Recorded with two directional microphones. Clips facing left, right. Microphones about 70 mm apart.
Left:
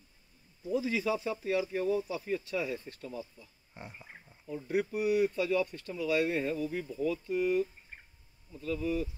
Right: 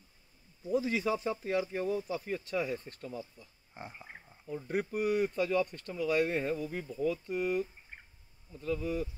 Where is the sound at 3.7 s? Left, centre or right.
Centre.